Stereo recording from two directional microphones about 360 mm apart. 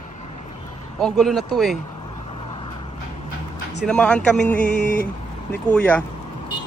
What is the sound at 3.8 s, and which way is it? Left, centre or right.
Speech, centre.